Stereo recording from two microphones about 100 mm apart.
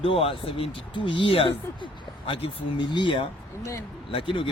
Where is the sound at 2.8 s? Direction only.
50° left (ahead or behind).